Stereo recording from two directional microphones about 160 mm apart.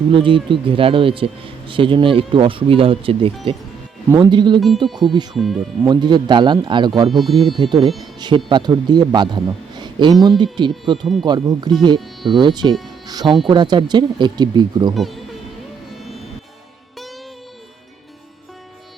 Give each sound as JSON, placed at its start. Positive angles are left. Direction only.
{"t": 0.1, "sound": "a man's voice", "side_deg": -30}
{"t": 5.3, "sound": "speech", "side_deg": 0}
{"t": 5.8, "sound": "a man's voice", "side_deg": -25}
{"t": 7.1, "sound": "speech", "side_deg": 0}
{"t": 7.6, "sound": "a man's voice", "side_deg": -30}
{"t": 11.0, "sound": "speech", "side_deg": 0}
{"t": 11.3, "sound": "a man's voice", "side_deg": -25}
{"t": 11.9, "sound": "speech", "side_deg": 0}
{"t": 12.4, "sound": "a man's voice", "side_deg": -25}
{"t": 14.9, "sound": "music", "side_deg": 0}